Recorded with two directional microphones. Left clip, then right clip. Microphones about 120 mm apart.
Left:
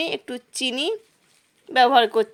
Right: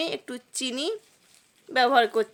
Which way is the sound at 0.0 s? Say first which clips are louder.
Left 4 dB; 20° left (ahead or behind).